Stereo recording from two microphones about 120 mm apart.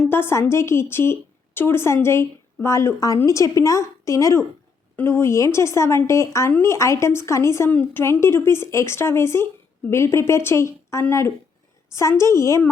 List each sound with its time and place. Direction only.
0.1 s a woman's voice: 20° left (ahead or behind)